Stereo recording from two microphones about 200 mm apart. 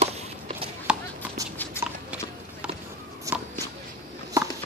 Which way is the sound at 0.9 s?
5° right (ahead or behind).